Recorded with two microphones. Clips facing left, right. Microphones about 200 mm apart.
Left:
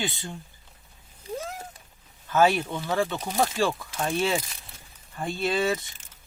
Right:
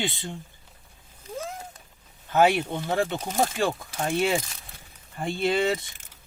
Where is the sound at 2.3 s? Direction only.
20° right (ahead or behind).